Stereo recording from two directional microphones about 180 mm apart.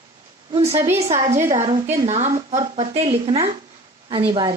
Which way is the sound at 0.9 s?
40° right (ahead or behind).